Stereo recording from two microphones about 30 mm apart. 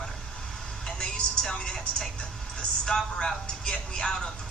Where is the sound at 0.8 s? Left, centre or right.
Left.